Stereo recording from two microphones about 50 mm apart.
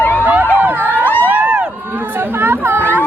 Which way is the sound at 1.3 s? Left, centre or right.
Right.